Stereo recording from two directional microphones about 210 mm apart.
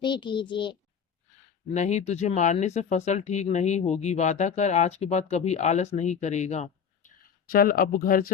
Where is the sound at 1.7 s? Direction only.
35° left (ahead or behind).